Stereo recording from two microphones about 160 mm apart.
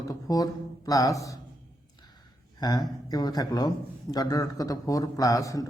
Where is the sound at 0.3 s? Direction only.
20° left (ahead or behind).